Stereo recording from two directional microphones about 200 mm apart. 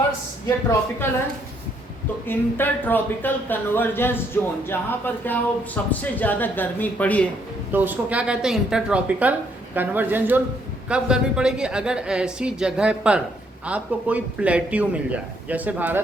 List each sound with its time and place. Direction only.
0.4 s speech: 15° left (ahead or behind)
2.2 s speech: 10° left (ahead or behind)
7.7 s a woman's voice: 10° right (ahead or behind)